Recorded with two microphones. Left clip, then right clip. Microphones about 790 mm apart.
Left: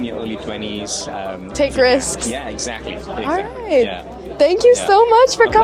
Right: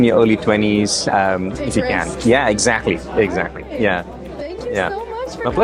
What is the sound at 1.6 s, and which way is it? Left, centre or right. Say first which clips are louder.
Speech: left 11 dB; left.